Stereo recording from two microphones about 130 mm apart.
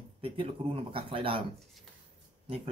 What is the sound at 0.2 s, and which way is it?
Speech, 45° right (ahead or behind).